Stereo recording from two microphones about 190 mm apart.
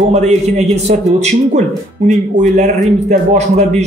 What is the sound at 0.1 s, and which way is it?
Speech, 35° right (ahead or behind).